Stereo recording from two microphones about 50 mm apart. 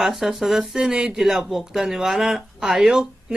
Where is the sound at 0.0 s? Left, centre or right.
Centre.